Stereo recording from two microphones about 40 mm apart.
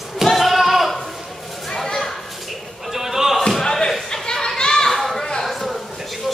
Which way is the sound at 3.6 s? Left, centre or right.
Centre.